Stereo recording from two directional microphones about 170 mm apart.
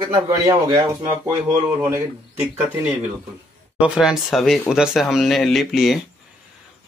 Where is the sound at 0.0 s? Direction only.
25° right (ahead or behind).